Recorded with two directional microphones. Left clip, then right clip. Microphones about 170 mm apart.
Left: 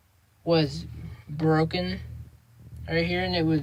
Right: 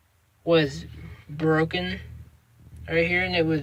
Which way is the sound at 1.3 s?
10° left (ahead or behind).